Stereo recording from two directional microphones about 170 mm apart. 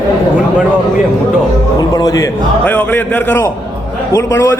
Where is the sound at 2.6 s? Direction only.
10° left (ahead or behind).